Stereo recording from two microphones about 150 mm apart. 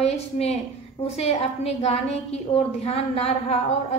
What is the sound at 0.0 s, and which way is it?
A woman's voice, 45° left (ahead or behind).